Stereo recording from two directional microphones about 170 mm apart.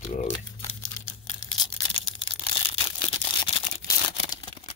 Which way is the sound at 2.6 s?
35° left (ahead or behind).